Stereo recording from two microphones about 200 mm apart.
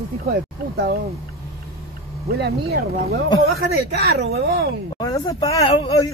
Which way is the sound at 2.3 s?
50° right (ahead or behind).